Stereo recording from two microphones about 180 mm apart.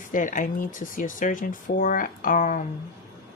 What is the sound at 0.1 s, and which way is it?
Speech, 45° left (ahead or behind).